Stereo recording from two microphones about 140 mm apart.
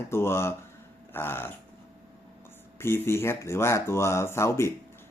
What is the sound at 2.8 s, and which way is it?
Speech, 15° left (ahead or behind).